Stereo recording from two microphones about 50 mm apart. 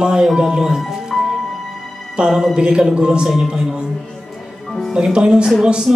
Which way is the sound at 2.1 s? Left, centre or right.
Centre.